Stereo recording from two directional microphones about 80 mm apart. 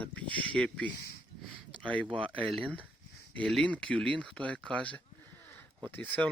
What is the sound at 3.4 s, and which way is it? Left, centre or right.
A man's voice, centre.